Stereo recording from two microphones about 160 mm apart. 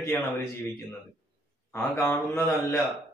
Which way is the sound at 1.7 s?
10° left (ahead or behind).